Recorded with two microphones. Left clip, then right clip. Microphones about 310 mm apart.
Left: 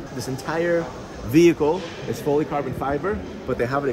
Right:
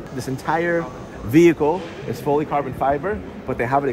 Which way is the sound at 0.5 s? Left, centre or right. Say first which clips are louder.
Right 2 dB; centre.